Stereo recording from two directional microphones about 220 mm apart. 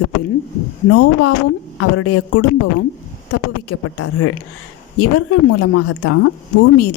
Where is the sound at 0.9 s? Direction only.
90° left.